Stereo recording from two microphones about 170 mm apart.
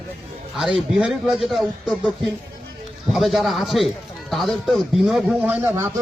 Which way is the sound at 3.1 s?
Centre (ahead or behind).